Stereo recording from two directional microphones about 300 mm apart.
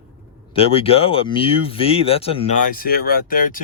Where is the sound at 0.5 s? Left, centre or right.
Centre.